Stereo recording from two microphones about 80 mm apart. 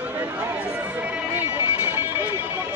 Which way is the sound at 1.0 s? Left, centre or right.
Right.